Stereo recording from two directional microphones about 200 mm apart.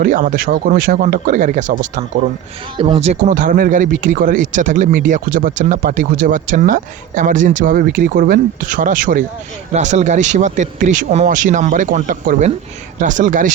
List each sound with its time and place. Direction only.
0.0 s speech: 40° right (ahead or behind)
2.7 s speech: 30° right (ahead or behind)